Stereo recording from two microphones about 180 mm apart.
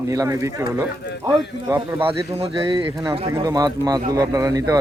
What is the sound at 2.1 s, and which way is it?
A man's voice, 30° right (ahead or behind).